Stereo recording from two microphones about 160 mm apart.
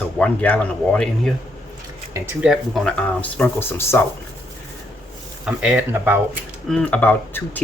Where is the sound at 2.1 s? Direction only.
15° right (ahead or behind).